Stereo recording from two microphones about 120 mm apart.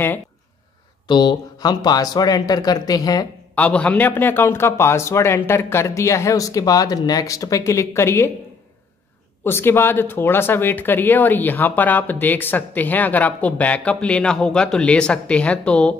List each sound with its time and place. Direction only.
1.0 s speech: 40° left (ahead or behind)
3.5 s a man's voice: 10° left (ahead or behind)
9.4 s speech: 20° left (ahead or behind)